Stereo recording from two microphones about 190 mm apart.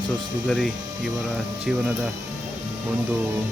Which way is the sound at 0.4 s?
Centre (ahead or behind).